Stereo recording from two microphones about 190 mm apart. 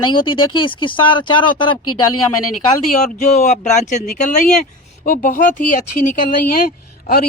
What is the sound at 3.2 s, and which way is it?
Speech, 35° left (ahead or behind).